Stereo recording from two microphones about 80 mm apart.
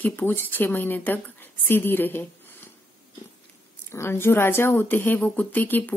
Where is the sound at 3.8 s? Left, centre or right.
Left.